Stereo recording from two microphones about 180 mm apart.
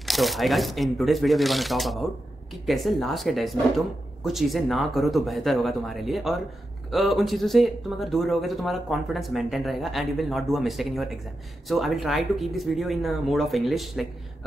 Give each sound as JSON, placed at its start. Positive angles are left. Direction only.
{"t": 0.0, "sound": "speech", "side_deg": 0}